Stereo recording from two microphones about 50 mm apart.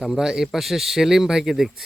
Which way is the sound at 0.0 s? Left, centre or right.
Centre.